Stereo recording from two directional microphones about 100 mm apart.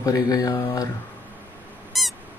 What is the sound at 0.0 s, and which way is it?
Speech, 35° left (ahead or behind).